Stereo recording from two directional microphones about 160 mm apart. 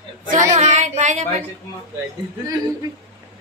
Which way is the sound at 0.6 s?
45° right (ahead or behind).